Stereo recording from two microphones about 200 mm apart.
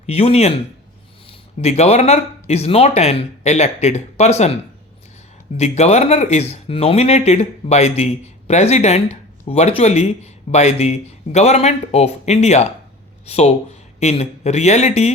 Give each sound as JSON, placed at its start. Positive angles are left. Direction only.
{"t": 0.0, "sound": "speech", "side_deg": 30}
{"t": 1.6, "sound": "speech", "side_deg": 35}
{"t": 5.5, "sound": "speech", "side_deg": 35}